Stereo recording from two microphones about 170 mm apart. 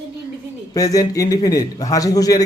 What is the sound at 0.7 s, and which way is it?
Speech, 20° left (ahead or behind).